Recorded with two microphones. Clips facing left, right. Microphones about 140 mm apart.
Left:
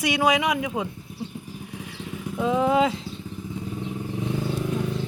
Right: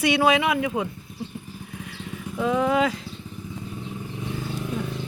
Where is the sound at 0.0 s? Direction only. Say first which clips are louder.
Right 2 dB; 15° left (ahead or behind).